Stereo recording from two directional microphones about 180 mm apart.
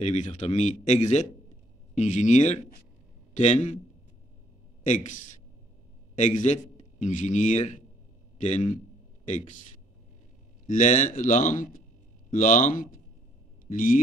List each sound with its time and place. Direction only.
0.0 s speech: 40° left (ahead or behind)
4.8 s a man's voice: 45° left (ahead or behind)
10.7 s speech: 45° left (ahead or behind)